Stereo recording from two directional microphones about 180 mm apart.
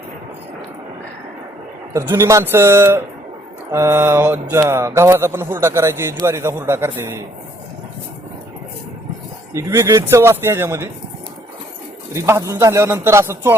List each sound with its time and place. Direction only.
1.9 s mantra: 15° right (ahead or behind)
9.5 s mantra: 15° right (ahead or behind)
12.1 s mantra: 15° right (ahead or behind)